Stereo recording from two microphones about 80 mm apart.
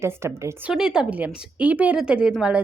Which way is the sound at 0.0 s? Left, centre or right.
Right.